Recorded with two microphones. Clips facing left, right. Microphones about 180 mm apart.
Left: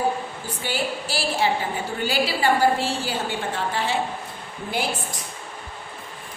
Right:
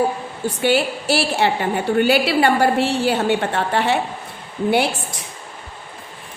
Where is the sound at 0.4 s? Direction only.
70° right (ahead or behind).